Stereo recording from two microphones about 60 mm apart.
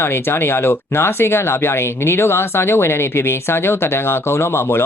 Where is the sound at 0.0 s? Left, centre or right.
Left.